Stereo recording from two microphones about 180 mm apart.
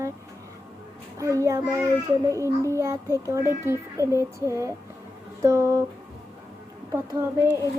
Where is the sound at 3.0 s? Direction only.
15° left (ahead or behind).